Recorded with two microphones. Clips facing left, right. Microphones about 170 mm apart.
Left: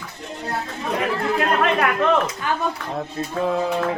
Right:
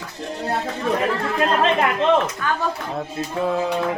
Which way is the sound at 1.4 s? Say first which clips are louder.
Right 3 dB; 25° right (ahead or behind).